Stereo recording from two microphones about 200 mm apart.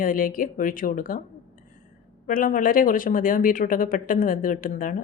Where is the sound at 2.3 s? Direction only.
45° left (ahead or behind).